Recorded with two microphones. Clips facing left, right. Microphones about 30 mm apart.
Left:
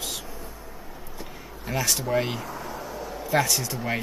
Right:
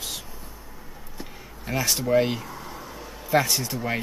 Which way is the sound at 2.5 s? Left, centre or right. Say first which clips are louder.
Left 3 dB; left.